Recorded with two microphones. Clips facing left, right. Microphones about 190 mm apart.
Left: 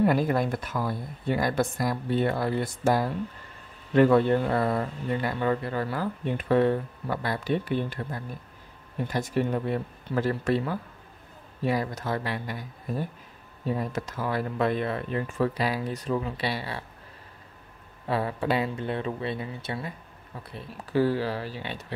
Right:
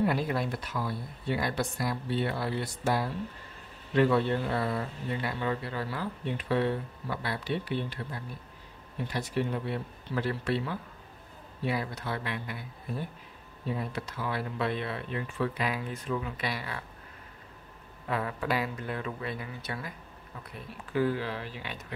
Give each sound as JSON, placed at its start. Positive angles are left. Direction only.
{"t": 0.0, "sound": "speech", "side_deg": 50}
{"t": 18.0, "sound": "speech", "side_deg": 30}